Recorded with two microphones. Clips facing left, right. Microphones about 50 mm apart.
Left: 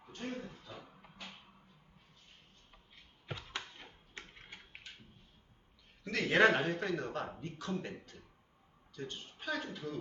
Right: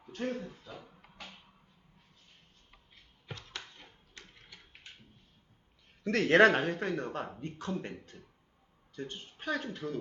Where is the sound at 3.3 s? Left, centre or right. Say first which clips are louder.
Left 2 dB; centre.